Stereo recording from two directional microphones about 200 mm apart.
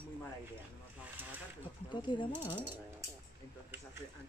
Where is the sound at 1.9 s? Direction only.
25° left (ahead or behind).